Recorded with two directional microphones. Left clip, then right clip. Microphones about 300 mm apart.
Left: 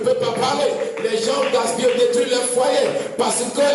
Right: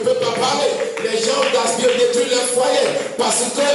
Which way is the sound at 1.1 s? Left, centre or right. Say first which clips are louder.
Right 2 dB; centre.